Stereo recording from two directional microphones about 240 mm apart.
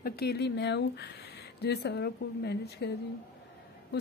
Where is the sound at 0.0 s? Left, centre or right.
Left.